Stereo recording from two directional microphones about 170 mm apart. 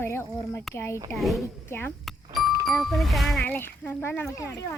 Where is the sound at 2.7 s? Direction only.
Centre (ahead or behind).